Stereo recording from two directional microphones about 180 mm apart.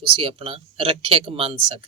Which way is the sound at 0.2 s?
30° right (ahead or behind).